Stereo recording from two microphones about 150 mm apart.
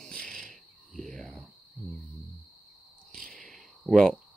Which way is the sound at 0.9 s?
5° left (ahead or behind).